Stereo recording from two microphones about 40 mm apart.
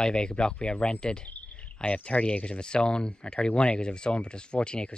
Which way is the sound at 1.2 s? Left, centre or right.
Left.